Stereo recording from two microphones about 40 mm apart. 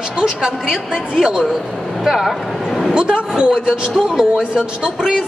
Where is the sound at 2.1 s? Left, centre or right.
Centre.